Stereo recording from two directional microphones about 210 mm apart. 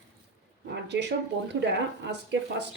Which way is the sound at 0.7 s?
55° right (ahead or behind).